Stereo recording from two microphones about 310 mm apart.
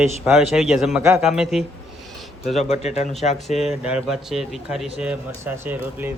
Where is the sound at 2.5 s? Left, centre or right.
Left.